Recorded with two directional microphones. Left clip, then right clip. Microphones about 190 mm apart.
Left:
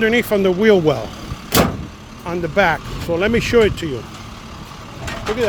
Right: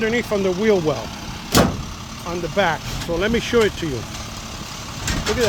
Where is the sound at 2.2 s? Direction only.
25° left (ahead or behind).